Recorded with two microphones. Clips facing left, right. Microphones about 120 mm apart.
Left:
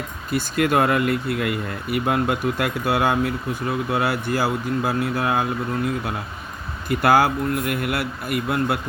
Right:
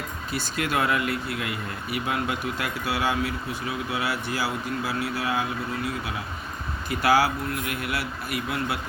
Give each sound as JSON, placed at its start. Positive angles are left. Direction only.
{"t": 0.3, "sound": "speech", "side_deg": 50}